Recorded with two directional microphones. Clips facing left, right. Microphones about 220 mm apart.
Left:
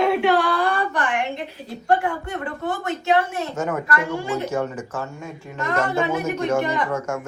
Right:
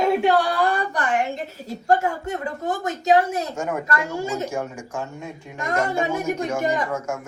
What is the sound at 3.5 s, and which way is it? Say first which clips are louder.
Speech: left 2 dB; 10° right (ahead or behind).